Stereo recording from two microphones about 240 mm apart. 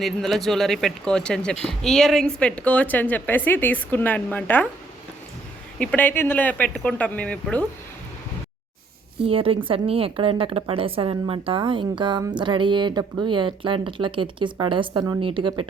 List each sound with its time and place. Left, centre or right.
0.0 s speech: centre
5.8 s speech: centre
9.2 s a woman's voice: right